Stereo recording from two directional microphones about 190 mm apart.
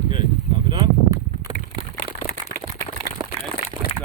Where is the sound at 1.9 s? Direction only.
40° left (ahead or behind).